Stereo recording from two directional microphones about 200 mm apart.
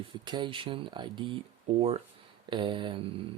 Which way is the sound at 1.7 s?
35° right (ahead or behind).